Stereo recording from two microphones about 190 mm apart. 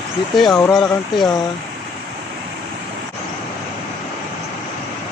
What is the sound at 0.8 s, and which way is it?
Speech, 20° left (ahead or behind).